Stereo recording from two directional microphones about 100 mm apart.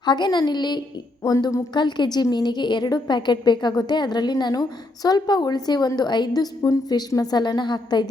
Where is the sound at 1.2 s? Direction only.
35° left (ahead or behind).